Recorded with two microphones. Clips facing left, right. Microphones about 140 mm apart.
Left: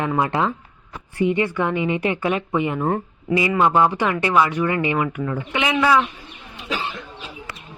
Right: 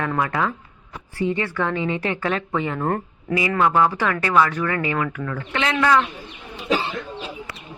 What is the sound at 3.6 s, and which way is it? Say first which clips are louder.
Speech: even; 20° left (ahead or behind).